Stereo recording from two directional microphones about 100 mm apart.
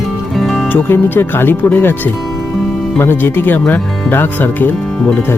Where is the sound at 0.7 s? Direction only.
20° left (ahead or behind).